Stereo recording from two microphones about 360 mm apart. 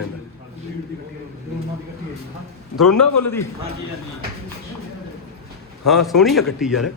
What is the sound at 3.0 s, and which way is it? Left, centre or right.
Speech, left.